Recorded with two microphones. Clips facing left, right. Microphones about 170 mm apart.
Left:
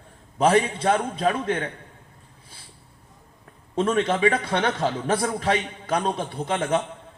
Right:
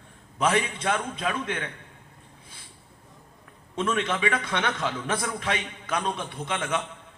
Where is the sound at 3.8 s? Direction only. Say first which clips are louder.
Left 5 dB; 40° left (ahead or behind).